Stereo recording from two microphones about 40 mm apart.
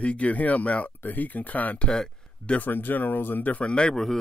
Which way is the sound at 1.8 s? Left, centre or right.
Left.